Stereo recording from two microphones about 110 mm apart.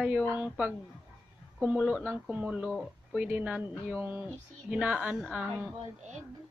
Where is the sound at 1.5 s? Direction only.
10° right (ahead or behind).